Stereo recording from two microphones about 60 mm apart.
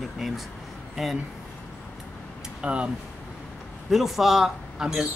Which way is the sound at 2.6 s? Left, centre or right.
Right.